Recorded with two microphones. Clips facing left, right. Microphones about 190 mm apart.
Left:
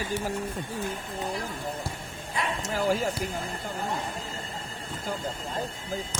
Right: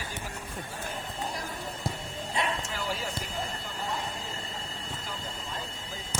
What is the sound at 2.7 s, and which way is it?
Speech, 50° left (ahead or behind).